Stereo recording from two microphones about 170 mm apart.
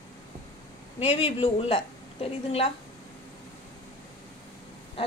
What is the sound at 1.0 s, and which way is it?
Speech, 35° left (ahead or behind).